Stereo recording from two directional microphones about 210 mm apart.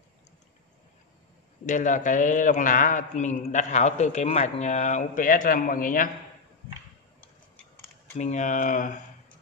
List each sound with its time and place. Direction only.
1.7 s a man's voice: 35° left (ahead or behind)
8.2 s a man's voice: 35° left (ahead or behind)